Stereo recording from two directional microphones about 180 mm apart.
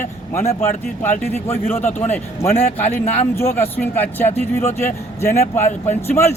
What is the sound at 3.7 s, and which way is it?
A man's voice, 10° left (ahead or behind).